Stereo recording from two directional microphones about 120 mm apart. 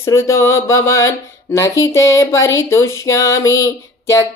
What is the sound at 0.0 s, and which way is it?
Speech, 25° left (ahead or behind).